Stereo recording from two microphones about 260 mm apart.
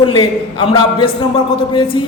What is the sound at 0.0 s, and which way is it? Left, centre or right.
A woman's voice, centre.